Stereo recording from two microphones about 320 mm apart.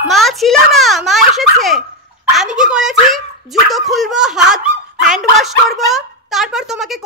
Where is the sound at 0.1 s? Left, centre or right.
Centre.